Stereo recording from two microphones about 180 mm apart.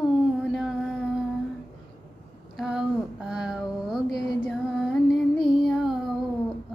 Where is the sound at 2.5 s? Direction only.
5° right (ahead or behind).